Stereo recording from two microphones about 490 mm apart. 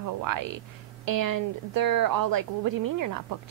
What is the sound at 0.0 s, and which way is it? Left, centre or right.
A woman's voice, right.